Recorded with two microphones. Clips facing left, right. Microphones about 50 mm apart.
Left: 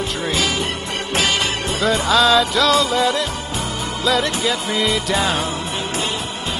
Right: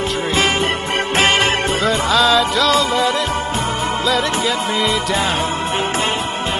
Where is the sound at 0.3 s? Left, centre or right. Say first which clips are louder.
Right 5 dB; right.